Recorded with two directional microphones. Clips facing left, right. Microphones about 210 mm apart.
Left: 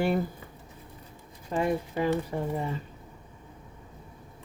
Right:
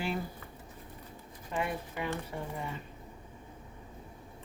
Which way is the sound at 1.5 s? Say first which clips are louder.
Left 7 dB; 35° left (ahead or behind).